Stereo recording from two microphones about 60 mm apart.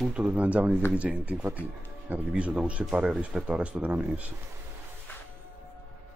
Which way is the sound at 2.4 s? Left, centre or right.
Right.